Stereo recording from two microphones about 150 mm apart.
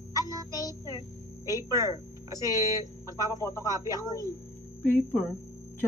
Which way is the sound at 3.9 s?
20° left (ahead or behind).